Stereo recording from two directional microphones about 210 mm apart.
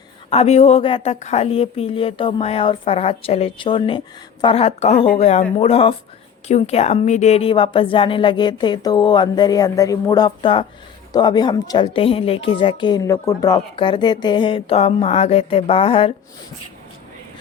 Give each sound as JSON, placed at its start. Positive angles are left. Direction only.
{"t": 0.3, "sound": "a woman's voice", "side_deg": 30}